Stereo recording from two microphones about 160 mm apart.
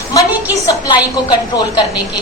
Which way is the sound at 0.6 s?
20° left (ahead or behind).